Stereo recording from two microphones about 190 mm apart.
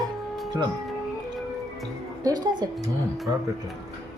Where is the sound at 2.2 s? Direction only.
20° right (ahead or behind).